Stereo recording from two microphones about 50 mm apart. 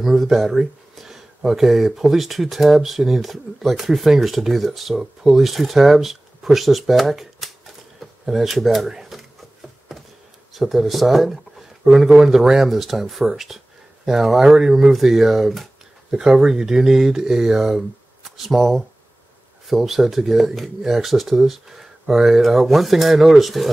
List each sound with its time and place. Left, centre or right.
0.0 s speech: centre
8.0 s drawer open or close: centre
10.5 s speech: centre